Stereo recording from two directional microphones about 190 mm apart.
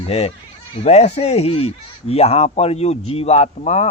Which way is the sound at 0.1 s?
35° left (ahead or behind).